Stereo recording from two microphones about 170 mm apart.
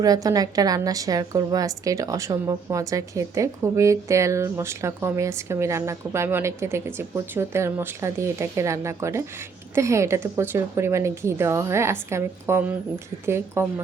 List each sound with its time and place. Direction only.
0.0 s a woman's voice: 20° right (ahead or behind)